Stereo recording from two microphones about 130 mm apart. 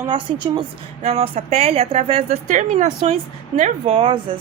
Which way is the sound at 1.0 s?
55° right (ahead or behind).